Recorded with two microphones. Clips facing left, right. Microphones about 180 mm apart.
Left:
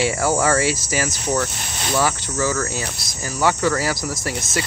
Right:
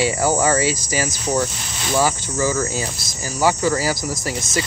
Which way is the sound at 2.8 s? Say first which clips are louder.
Right 2 dB; 5° right (ahead or behind).